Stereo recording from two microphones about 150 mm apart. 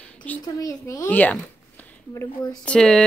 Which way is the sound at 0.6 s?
20° left (ahead or behind).